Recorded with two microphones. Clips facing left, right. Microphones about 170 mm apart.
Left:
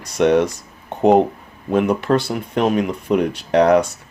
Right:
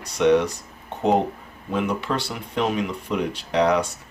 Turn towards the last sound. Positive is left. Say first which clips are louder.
# left 6 dB
turn(degrees=50)  # may be behind; listen again after turning